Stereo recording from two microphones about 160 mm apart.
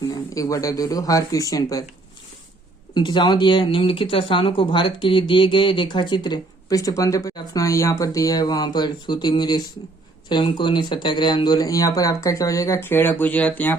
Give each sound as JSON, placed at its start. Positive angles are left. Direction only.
{"t": 0.1, "sound": "speech", "side_deg": 20}
{"t": 2.9, "sound": "speech", "side_deg": 30}